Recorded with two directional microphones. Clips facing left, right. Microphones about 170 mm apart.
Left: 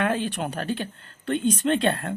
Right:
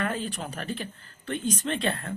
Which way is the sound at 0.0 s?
75° left (ahead or behind).